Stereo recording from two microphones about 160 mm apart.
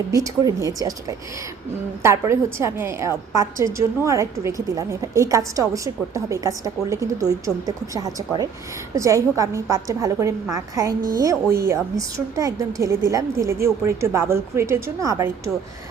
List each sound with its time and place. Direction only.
0.1 s a woman's voice: 20° right (ahead or behind)